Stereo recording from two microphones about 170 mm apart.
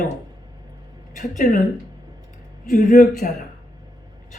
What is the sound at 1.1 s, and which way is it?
Speech, 50° left (ahead or behind).